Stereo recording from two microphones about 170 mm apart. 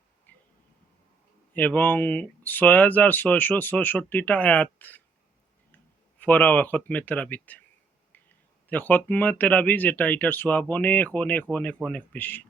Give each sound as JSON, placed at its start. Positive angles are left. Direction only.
{"t": 0.3, "sound": "a sound", "side_deg": 10}
{"t": 1.5, "sound": "speech", "side_deg": 10}
{"t": 6.1, "sound": "speech", "side_deg": 10}
{"t": 8.7, "sound": "speech", "side_deg": 10}